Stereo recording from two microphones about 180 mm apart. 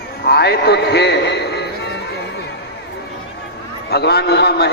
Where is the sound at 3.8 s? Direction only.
65° left (ahead or behind).